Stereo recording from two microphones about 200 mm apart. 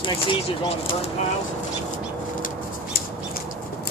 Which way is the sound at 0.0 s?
25° left (ahead or behind).